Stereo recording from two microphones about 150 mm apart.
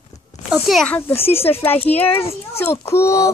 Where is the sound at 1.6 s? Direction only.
15° left (ahead or behind).